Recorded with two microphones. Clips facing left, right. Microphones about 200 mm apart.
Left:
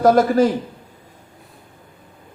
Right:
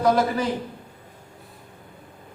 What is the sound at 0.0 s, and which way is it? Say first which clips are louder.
Speech: left 7 dB; 50° left (ahead or behind).